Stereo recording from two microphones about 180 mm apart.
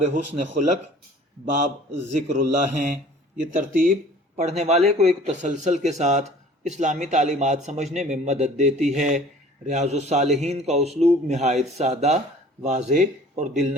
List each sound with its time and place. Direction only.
0.0 s a man's voice: 40° right (ahead or behind)
4.4 s a man's voice: 40° right (ahead or behind)